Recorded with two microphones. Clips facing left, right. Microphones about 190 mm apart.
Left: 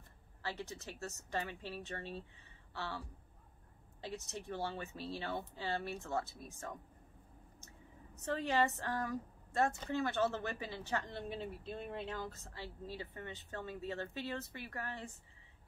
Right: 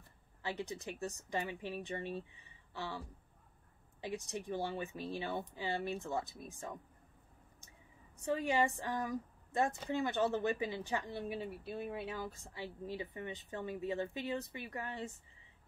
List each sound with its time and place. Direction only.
0.4 s a woman's voice: 15° right (ahead or behind)
4.0 s a woman's voice: 15° right (ahead or behind)
8.2 s a woman's voice: 10° right (ahead or behind)